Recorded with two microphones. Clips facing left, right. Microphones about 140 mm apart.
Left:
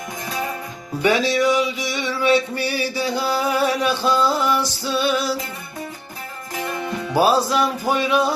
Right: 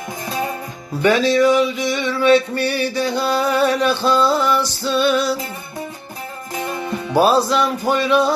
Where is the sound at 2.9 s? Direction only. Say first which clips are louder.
Right 3 dB; 10° left (ahead or behind).